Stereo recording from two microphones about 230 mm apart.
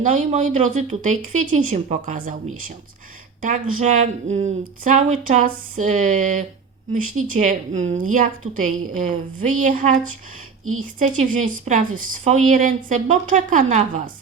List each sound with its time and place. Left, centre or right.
0.0 s a woman's voice: right